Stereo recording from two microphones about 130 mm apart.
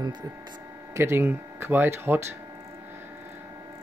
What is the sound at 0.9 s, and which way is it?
Speech, 20° right (ahead or behind).